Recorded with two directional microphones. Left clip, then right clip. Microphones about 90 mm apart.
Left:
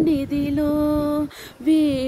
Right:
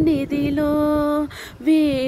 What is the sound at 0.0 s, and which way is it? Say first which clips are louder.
Music: right 1 dB; 15° left (ahead or behind).